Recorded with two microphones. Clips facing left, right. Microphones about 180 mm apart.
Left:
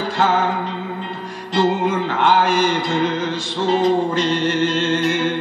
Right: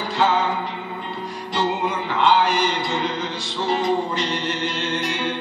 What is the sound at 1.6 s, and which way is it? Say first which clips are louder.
Music: left 6 dB; 50° left (ahead or behind).